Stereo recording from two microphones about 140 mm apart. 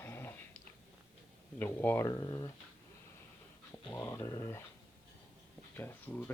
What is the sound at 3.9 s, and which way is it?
Speech, 25° left (ahead or behind).